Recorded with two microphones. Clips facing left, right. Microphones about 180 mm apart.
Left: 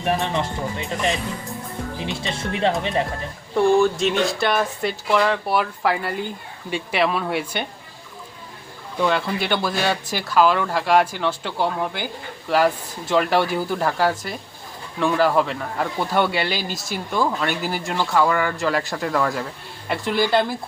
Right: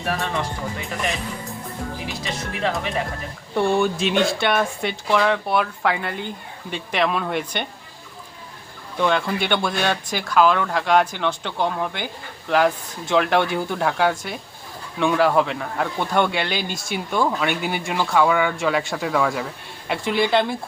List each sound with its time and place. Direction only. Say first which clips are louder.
0.0 s speech: left 3 dB; 20° left (ahead or behind)
3.5 s speech: left 3 dB; centre (ahead or behind)
9.0 s speech: even; 5° left (ahead or behind)